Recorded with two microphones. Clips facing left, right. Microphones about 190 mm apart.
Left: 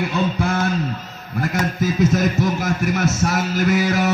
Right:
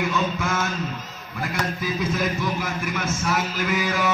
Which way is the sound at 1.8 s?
45° left (ahead or behind).